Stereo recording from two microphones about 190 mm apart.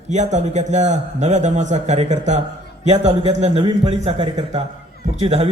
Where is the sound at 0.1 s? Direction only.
40° right (ahead or behind).